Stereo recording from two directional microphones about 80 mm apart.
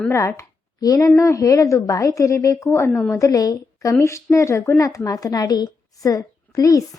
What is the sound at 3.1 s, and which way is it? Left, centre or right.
A woman's voice, left.